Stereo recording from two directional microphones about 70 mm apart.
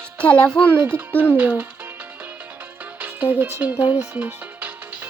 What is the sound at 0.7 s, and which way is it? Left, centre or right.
Speech, right.